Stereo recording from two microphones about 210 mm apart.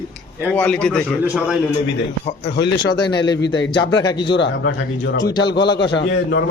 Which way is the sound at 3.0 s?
20° left (ahead or behind).